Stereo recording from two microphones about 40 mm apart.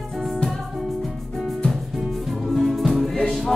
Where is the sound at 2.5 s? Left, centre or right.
Centre.